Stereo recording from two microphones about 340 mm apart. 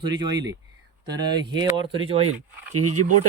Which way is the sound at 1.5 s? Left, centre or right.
Centre.